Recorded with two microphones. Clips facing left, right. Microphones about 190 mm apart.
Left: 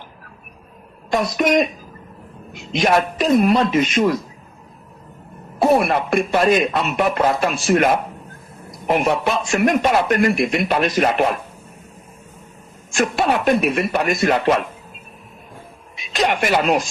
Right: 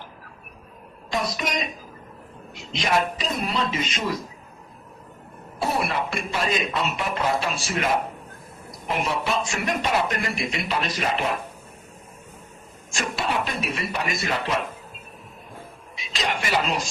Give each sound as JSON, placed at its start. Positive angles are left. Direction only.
{"t": 1.1, "sound": "a man's voice", "side_deg": 55}
{"t": 5.5, "sound": "speech", "side_deg": 55}
{"t": 8.9, "sound": "speech", "side_deg": 55}
{"t": 13.0, "sound": "speech", "side_deg": 55}
{"t": 16.0, "sound": "speech", "side_deg": 55}